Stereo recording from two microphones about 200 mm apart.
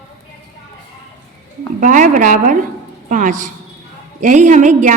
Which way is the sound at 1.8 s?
40° right (ahead or behind).